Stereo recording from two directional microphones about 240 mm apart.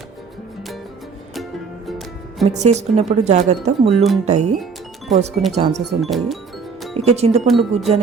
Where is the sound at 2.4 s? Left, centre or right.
Right.